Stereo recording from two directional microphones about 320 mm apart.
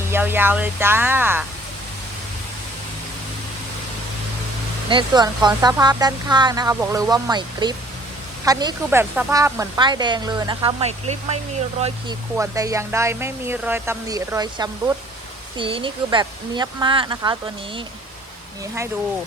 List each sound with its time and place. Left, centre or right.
0.1 s speech: centre
4.9 s speech: centre